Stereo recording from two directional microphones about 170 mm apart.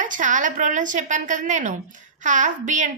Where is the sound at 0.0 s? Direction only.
50° right (ahead or behind).